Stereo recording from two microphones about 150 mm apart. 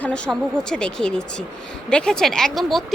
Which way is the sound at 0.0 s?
5° left (ahead or behind).